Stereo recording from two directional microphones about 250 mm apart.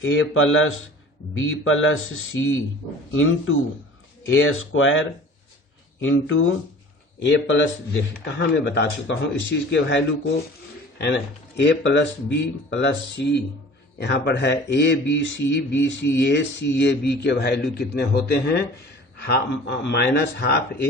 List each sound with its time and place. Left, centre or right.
0.0 s speech: left